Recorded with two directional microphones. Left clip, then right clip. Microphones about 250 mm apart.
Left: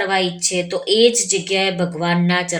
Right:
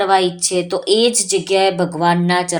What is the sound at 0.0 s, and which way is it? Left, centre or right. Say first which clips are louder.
Speech: right 4 dB; centre.